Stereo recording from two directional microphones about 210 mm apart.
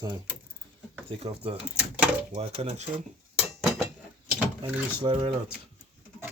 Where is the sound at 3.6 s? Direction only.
Centre (ahead or behind).